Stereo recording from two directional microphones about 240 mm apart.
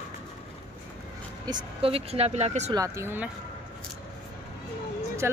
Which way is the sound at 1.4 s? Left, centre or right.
Right.